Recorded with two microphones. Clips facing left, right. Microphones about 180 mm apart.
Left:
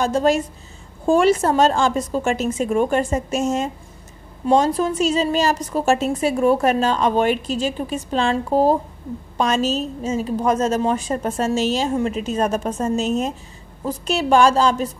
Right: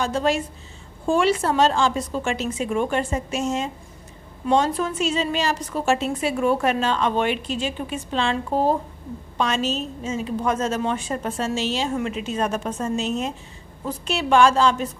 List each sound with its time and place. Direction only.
0.0 s a woman's voice: 45° left (ahead or behind)